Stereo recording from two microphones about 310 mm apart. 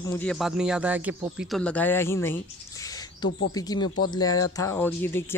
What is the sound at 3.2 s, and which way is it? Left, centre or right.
Speech, left.